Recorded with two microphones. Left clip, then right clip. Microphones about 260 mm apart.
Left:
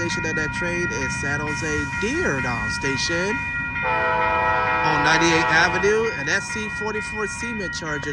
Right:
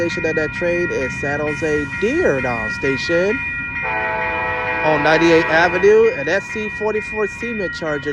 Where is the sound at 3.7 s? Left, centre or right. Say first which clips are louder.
Left 1 dB; left.